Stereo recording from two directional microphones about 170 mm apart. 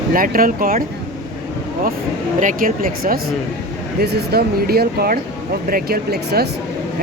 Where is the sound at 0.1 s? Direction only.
55° right (ahead or behind).